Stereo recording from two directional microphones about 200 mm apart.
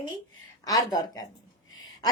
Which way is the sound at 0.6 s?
20° left (ahead or behind).